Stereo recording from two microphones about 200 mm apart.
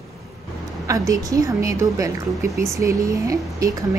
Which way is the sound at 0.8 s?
15° right (ahead or behind).